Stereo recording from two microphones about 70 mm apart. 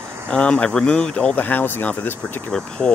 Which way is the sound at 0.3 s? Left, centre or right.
Centre.